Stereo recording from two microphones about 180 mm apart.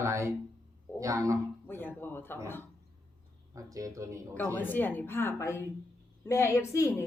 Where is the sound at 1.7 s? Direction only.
10° left (ahead or behind).